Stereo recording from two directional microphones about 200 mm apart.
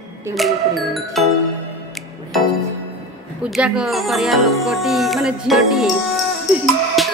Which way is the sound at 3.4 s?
5° right (ahead or behind).